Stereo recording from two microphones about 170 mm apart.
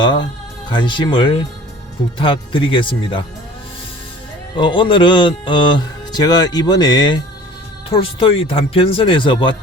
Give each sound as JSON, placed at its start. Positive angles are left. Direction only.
{"t": 0.0, "sound": "speech", "side_deg": 25}
{"t": 4.5, "sound": "speech", "side_deg": 30}